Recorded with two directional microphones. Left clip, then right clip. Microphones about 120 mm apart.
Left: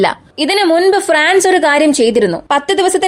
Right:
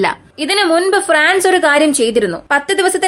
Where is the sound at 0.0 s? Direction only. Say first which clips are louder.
Left 3 dB; 30° left (ahead or behind).